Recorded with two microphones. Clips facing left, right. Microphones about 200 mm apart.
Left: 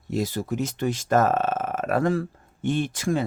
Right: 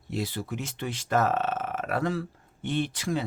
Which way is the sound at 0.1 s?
45° left (ahead or behind).